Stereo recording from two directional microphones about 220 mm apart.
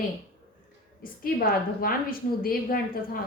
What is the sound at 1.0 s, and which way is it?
A woman's voice, 40° left (ahead or behind).